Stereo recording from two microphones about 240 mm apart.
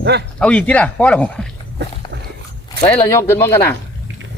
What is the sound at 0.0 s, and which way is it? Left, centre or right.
Speech, right.